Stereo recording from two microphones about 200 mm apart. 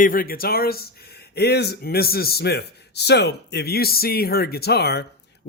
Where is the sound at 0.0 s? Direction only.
45° left (ahead or behind).